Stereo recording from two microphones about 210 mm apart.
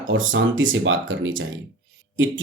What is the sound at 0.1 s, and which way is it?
Speech, 65° right (ahead or behind).